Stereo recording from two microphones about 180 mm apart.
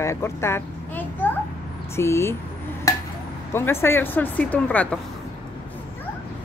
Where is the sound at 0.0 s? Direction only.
15° left (ahead or behind).